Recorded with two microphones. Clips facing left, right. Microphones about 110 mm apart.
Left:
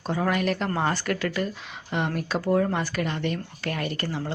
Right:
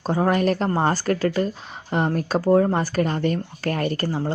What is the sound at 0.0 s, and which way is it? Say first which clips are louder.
Speech: right 5 dB; 35° right (ahead or behind).